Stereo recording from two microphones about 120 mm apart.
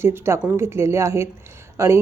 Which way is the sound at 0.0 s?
20° right (ahead or behind).